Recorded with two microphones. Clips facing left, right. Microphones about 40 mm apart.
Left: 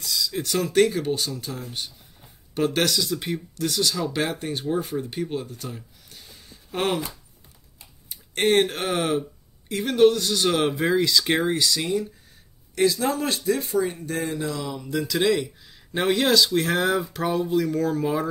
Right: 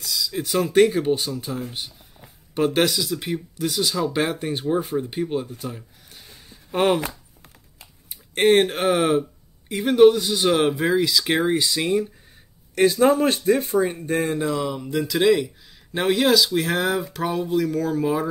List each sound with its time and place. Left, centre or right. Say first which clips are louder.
0.0 s speech: right 1 dB; centre
3.5 s speech: right 1 dB; centre
8.1 s speech: right 4 dB; centre
11.5 s speech: right 3 dB; centre
12.7 s speech: right 5 dB; right; by 18.3 s centre